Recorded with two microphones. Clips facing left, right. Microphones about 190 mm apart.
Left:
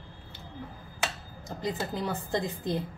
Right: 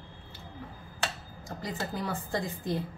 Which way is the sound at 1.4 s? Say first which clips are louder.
Left 3 dB; 20° left (ahead or behind).